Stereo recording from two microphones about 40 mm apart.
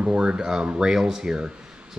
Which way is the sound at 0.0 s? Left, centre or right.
Right.